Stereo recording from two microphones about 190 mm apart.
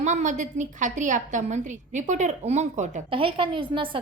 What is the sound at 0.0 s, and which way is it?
A woman's voice, 40° right (ahead or behind).